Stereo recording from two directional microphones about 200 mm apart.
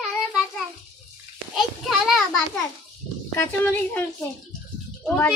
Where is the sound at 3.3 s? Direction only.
10° left (ahead or behind).